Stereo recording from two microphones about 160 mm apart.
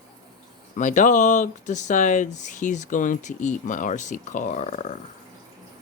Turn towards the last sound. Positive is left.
turn(degrees=50)  # may be behind; listen again after turning